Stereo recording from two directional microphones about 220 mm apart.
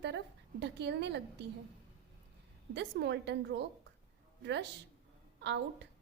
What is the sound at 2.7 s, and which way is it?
A woman's voice, 50° right (ahead or behind).